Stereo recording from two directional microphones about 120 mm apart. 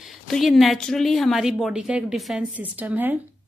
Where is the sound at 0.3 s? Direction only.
Centre (ahead or behind).